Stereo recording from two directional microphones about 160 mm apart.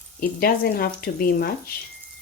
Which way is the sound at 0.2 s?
70° left (ahead or behind).